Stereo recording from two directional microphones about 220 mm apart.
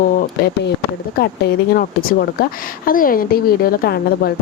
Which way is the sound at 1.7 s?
40° left (ahead or behind).